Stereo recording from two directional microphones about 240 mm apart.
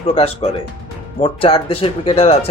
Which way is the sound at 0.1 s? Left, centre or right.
Left.